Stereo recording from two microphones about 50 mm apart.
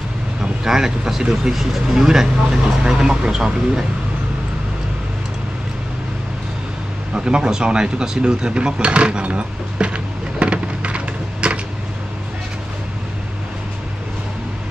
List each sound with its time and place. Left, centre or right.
0.7 s speech: centre
7.2 s speech: centre
10.4 s a sound: right